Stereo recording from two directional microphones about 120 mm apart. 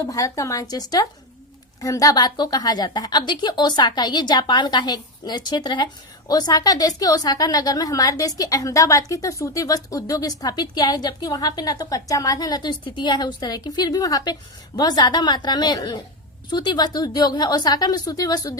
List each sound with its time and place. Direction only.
0.1 s a woman's voice: 25° left (ahead or behind)